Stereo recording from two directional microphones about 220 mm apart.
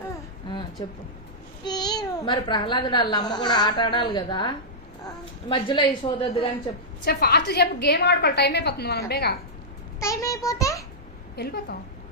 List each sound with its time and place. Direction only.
0.4 s a sound: 20° left (ahead or behind)
1.6 s a child's voice: 20° left (ahead or behind)
7.0 s a woman's voice: 45° left (ahead or behind)
10.0 s a child's voice: 15° left (ahead or behind)
11.3 s a woman's voice: 45° left (ahead or behind)